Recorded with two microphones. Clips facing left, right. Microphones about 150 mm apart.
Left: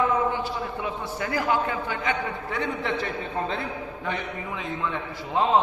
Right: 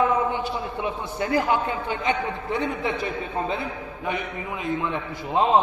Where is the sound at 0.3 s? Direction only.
20° right (ahead or behind).